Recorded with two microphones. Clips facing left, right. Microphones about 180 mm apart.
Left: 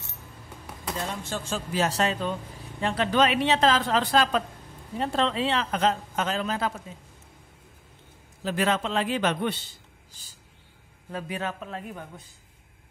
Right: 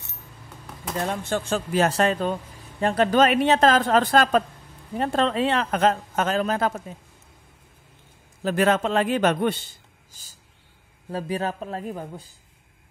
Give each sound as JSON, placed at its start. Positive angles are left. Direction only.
{"t": 0.9, "sound": "a man's voice", "side_deg": -55}
{"t": 8.4, "sound": "a man's voice", "side_deg": -50}
{"t": 10.2, "sound": "a sound", "side_deg": -45}
{"t": 11.1, "sound": "a man's voice", "side_deg": -35}